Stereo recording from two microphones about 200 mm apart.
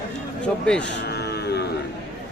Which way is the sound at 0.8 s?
55° left (ahead or behind).